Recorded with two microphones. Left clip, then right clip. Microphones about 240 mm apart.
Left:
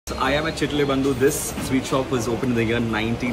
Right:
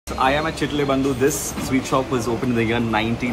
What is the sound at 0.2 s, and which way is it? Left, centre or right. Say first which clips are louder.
Speech: right 3 dB; centre.